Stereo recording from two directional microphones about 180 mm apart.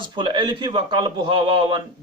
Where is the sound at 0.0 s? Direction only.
25° right (ahead or behind).